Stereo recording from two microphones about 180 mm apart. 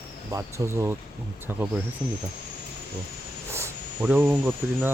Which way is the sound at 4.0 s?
5° right (ahead or behind).